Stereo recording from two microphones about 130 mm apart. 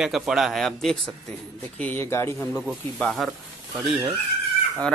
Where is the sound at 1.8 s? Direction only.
15° left (ahead or behind).